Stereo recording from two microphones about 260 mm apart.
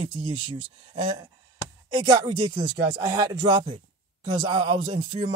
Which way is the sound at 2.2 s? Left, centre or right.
Centre.